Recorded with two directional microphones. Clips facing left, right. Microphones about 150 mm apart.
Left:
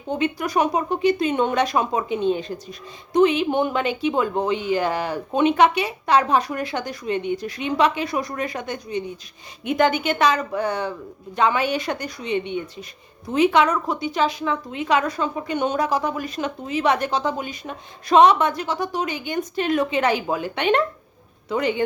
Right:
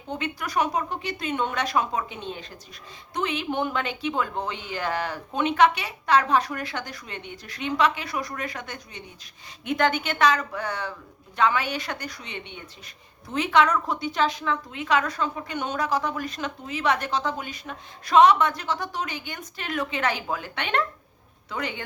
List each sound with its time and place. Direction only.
0.1 s speech: 15° left (ahead or behind)